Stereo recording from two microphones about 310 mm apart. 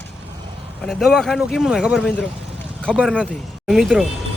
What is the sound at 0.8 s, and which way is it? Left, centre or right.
Speech, centre.